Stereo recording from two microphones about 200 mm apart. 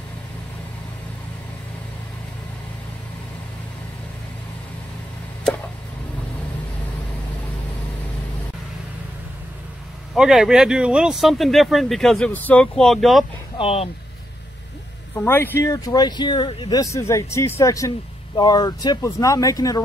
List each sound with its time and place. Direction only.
10.1 s speech: centre (ahead or behind)
13.6 s speech: 30° left (ahead or behind)
15.2 s speech: 10° left (ahead or behind)